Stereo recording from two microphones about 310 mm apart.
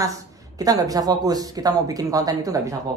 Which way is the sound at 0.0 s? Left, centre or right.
Centre.